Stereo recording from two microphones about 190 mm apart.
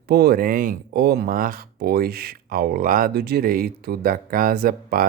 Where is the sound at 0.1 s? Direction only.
55° right (ahead or behind).